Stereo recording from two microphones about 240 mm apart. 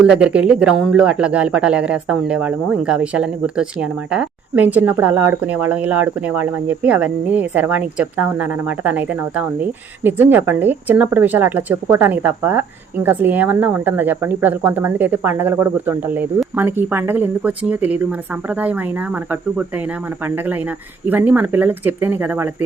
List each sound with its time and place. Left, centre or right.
0.0 s speech: centre